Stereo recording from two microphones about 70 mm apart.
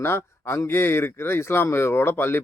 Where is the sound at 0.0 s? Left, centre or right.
Left.